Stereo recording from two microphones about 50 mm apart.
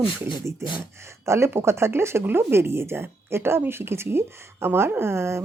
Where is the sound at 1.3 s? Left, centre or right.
Right.